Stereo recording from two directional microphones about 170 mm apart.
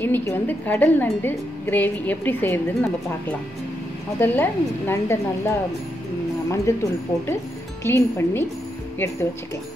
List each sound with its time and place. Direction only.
0.0 s a woman's voice: 10° left (ahead or behind)
6.5 s a woman's voice: 20° left (ahead or behind)